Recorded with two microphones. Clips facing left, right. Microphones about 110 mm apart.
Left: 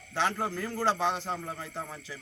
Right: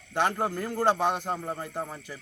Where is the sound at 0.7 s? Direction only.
50° right (ahead or behind).